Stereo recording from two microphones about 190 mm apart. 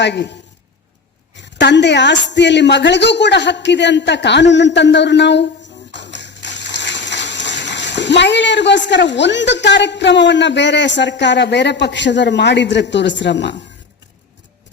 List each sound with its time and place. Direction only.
0.0 s speech: 65° left (ahead or behind)
1.4 s a woman's voice: 65° left (ahead or behind)